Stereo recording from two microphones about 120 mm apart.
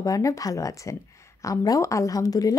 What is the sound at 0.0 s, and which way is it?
A woman's voice, 30° left (ahead or behind).